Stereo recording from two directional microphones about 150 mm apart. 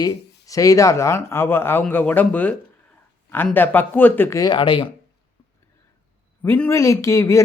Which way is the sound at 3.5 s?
15° left (ahead or behind).